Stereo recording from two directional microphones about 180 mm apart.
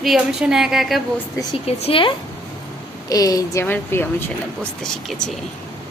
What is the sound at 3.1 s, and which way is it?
A woman's voice, 20° left (ahead or behind).